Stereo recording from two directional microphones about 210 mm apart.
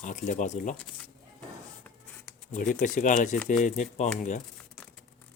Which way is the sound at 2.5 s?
40° left (ahead or behind).